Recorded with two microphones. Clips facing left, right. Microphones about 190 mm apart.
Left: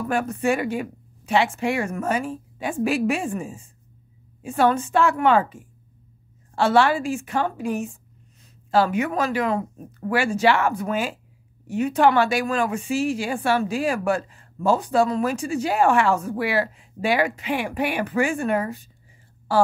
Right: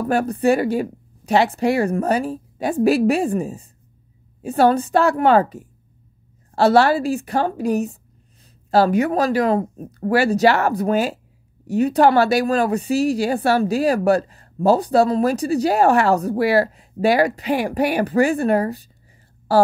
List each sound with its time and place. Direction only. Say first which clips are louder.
0.0 s a woman's voice: right 5 dB; 35° right (ahead or behind)